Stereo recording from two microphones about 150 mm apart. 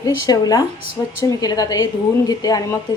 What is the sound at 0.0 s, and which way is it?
A woman's voice, 25° left (ahead or behind).